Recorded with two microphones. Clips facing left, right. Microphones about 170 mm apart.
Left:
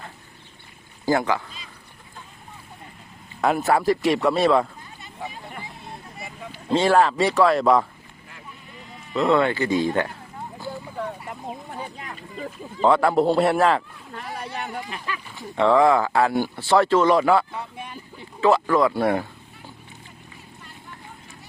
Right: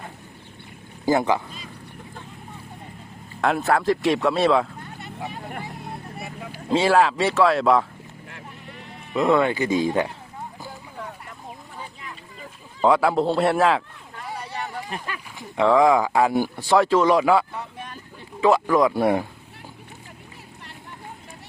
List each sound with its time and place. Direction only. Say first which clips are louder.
1.0 s speech: right 1 dB; 20° right (ahead or behind)
3.4 s speech: left 1 dB; centre (ahead or behind)
4.8 s vehicle: right 2 dB; 60° right (ahead or behind)
6.2 s speech: even; 5° right (ahead or behind)
9.3 s a man's voice: even; 15° right (ahead or behind)
12.8 s speech: left 1 dB; 5° right (ahead or behind)
14.8 s a sound: even; 45° right (ahead or behind)
15.5 s a man's voice: even; 5° right (ahead or behind)
17.5 s vehicle: left 1 dB; 10° left (ahead or behind)
18.3 s a man's voice: even; 10° right (ahead or behind)